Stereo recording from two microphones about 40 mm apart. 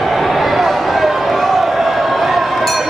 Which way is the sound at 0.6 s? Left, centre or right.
Centre.